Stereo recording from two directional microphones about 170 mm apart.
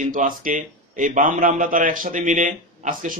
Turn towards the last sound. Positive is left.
turn(degrees=-55)  # may be behind; listen again after turning